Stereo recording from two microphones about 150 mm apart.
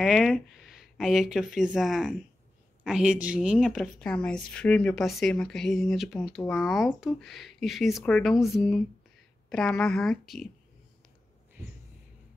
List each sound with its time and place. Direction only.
0.0 s speech: centre (ahead or behind)